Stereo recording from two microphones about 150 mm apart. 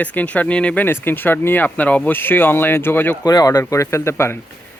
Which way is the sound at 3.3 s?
25° left (ahead or behind).